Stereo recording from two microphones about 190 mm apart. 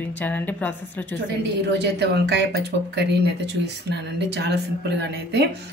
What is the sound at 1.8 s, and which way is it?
Speech, 60° right (ahead or behind).